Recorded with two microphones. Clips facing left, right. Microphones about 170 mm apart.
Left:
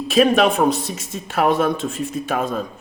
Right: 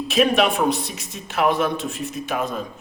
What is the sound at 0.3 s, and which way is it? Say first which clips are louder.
Speech: left 3 dB; 50° left (ahead or behind).